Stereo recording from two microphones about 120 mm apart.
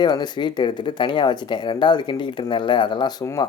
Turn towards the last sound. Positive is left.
turn(degrees=40)  # may be behind; listen again after turning